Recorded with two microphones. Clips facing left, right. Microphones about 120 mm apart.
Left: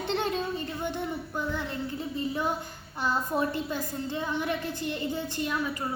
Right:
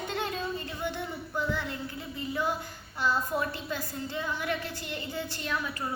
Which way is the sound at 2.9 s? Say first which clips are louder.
Left 1 dB; 20° left (ahead or behind).